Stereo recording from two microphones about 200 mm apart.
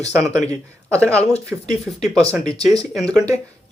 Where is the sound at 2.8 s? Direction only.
5° left (ahead or behind).